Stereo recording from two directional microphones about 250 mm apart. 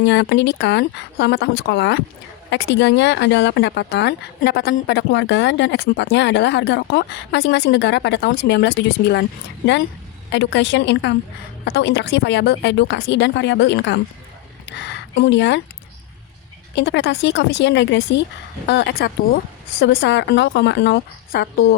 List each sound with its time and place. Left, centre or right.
0.0 s speech: left
10.3 s speech: left
16.7 s speech: left